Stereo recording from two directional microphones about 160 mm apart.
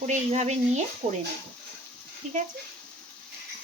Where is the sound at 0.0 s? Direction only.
50° right (ahead or behind).